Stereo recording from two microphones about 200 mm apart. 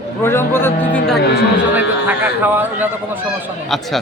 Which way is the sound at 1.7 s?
10° right (ahead or behind).